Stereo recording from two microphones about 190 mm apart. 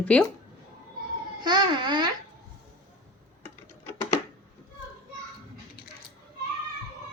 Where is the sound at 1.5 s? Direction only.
25° right (ahead or behind).